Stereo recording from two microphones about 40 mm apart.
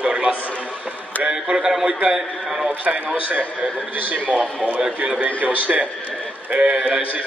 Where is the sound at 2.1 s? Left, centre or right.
Centre.